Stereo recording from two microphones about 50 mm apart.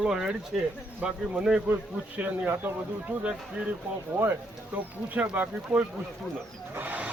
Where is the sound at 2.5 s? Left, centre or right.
Right.